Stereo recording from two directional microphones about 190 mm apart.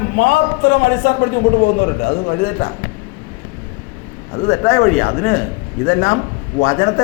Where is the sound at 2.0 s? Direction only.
50° left (ahead or behind).